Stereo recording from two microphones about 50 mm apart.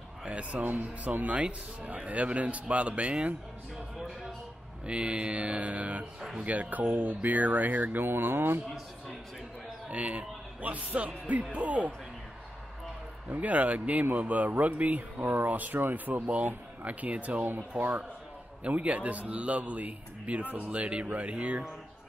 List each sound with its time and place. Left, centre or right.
0.2 s speech: right
1.3 s a man's voice: right
4.8 s a man's voice: right
9.8 s a man's voice: right
13.3 s a man's voice: right
17.5 s a man's voice: right